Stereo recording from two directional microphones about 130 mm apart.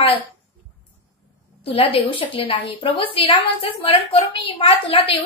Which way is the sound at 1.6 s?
45° left (ahead or behind).